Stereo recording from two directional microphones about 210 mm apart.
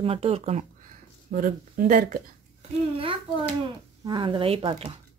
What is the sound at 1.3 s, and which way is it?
Speech, 40° right (ahead or behind).